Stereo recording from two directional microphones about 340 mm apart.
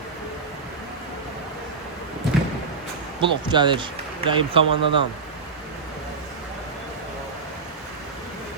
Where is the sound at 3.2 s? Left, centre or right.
Centre.